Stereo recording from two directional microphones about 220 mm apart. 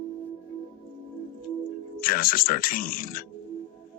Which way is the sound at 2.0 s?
40° left (ahead or behind).